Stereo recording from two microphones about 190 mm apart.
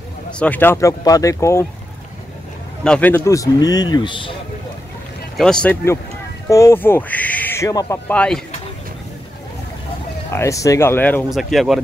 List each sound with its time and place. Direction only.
0.4 s speech: 10° left (ahead or behind)
2.8 s a man's voice: 5° left (ahead or behind); by 4.4 s 25° left (ahead or behind)
5.4 s speech: 5° left (ahead or behind)
10.3 s speech: 15° left (ahead or behind); by 11.8 s centre (ahead or behind)